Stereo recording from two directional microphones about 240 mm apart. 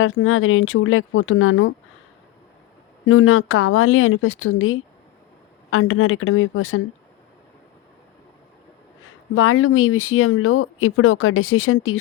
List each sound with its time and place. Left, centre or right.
0.0 s speech: left
3.1 s speech: left
9.0 s speech: left